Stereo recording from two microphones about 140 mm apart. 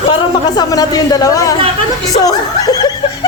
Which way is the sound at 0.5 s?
25° left (ahead or behind).